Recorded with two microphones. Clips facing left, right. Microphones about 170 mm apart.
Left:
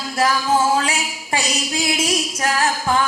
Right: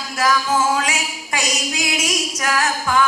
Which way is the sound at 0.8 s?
30° left (ahead or behind).